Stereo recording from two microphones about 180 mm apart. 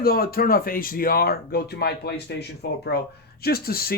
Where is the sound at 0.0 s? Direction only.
55° left (ahead or behind).